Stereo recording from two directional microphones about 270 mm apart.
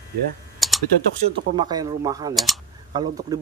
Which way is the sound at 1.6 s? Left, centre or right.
Centre.